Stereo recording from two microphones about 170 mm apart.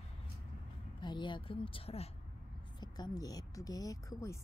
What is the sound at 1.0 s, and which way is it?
Speech, 25° left (ahead or behind).